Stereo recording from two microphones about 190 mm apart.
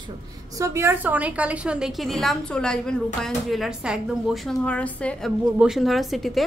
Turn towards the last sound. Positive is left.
turn(degrees=0)  # may be behind; listen again after turning